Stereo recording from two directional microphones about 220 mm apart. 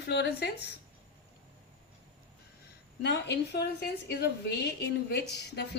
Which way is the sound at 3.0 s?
50° left (ahead or behind).